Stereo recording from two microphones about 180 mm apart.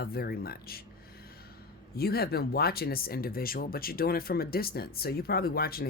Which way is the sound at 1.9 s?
60° left (ahead or behind).